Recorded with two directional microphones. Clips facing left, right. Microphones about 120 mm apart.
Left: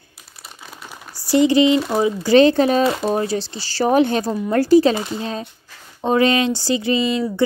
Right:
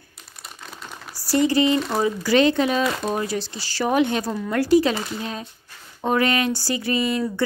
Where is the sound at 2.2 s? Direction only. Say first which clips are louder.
Left 6 dB; 30° left (ahead or behind).